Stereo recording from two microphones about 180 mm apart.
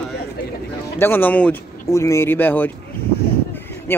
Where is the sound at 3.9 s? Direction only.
10° left (ahead or behind).